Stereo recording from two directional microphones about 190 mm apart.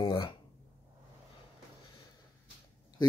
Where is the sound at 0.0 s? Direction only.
25° left (ahead or behind).